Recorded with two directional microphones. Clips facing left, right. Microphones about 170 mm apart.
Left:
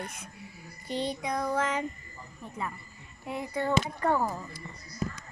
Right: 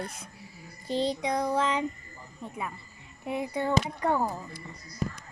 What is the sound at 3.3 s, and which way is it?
Speech, 15° right (ahead or behind).